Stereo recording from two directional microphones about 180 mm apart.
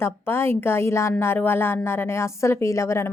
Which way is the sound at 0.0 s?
15° left (ahead or behind).